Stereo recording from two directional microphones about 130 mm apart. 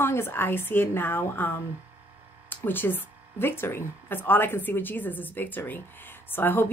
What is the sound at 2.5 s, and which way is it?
Speech, 15° left (ahead or behind).